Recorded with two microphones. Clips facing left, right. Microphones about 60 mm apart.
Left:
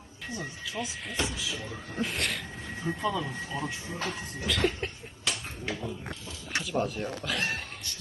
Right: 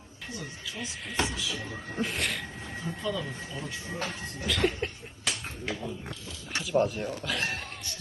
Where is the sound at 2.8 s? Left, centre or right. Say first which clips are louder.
Left 3 dB; left.